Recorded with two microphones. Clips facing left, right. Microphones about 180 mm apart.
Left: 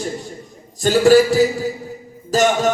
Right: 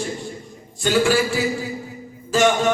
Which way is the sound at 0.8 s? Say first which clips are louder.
Left 7 dB; 40° left (ahead or behind).